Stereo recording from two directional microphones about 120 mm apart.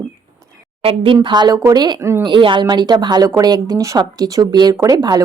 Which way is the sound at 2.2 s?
45° right (ahead or behind).